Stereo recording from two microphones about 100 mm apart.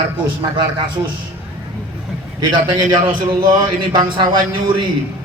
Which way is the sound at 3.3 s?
50° right (ahead or behind).